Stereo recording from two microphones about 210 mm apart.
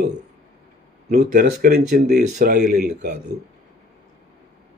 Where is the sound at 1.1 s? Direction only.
45° right (ahead or behind).